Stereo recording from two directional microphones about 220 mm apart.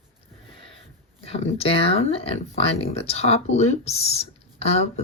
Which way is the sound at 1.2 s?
25° left (ahead or behind).